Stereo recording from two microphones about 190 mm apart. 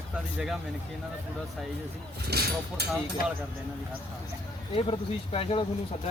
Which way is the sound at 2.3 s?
60° right (ahead or behind).